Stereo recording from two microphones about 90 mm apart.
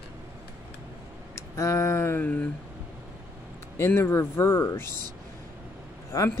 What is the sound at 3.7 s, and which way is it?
Speech, 30° left (ahead or behind).